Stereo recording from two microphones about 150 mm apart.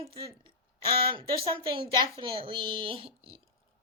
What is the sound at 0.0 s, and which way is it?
Speech, 40° right (ahead or behind).